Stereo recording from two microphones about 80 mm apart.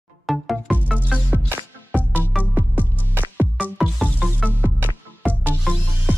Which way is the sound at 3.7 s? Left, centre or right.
Centre.